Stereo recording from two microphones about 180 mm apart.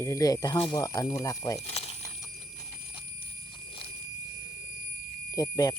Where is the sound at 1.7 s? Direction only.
35° left (ahead or behind).